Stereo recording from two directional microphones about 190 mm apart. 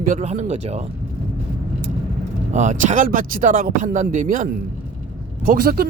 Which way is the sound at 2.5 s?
40° right (ahead or behind).